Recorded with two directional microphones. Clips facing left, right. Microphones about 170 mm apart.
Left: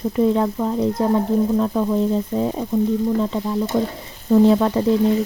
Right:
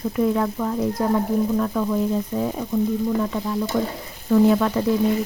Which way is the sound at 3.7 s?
25° left (ahead or behind).